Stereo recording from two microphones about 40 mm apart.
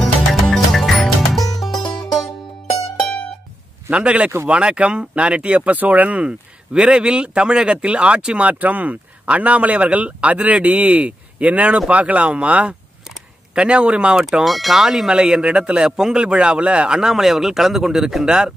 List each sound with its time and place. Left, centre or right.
0.0 s music: centre
3.9 s speech: right
5.8 s speech: right
13.6 s speech: right
14.4 s speech: centre
14.8 s speech: centre
17.0 s a man's voice: centre